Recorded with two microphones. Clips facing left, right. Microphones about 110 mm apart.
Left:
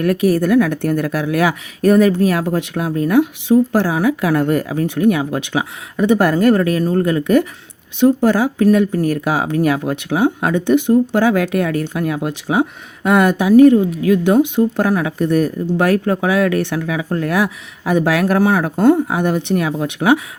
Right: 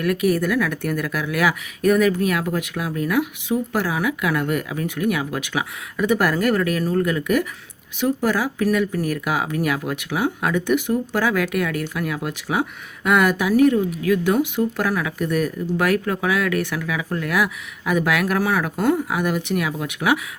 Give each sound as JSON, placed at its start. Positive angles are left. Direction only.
{"t": 0.0, "sound": "speech", "side_deg": 30}